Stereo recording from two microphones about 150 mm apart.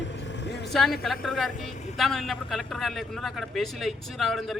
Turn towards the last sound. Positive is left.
turn(degrees=0)  # may be behind; listen again after turning